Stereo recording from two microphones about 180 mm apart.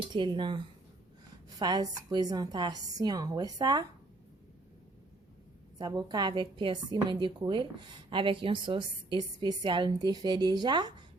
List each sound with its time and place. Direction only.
0.1 s a woman's voice: 25° right (ahead or behind)
5.8 s a woman's voice: 20° right (ahead or behind)